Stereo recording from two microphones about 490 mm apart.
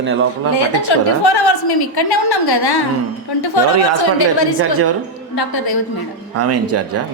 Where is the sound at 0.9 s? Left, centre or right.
Left.